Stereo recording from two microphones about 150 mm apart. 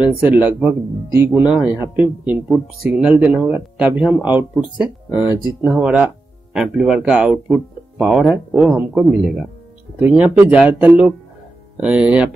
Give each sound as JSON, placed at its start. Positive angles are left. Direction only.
{"t": 0.2, "sound": "speech", "side_deg": -10}